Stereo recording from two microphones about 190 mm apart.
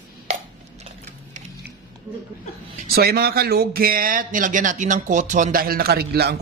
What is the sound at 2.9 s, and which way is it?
Speech, 55° right (ahead or behind).